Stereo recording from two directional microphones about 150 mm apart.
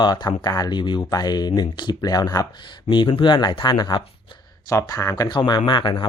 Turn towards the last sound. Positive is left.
turn(degrees=35)  # may be behind; listen again after turning